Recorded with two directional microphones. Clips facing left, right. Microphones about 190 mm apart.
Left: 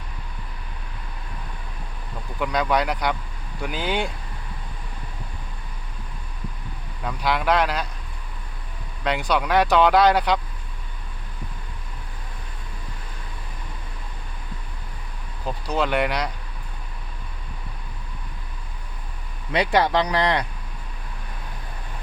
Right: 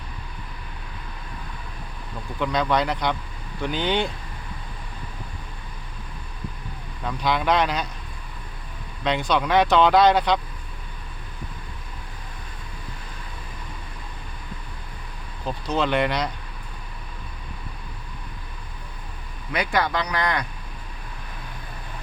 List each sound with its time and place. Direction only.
2.4 s speech: 10° left (ahead or behind)
7.0 s speech: 5° left (ahead or behind)
9.0 s speech: 10° left (ahead or behind)
15.7 s speech: 5° left (ahead or behind)
19.5 s speech: 30° left (ahead or behind)